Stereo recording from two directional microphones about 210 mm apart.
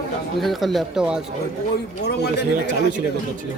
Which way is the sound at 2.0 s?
50° left (ahead or behind).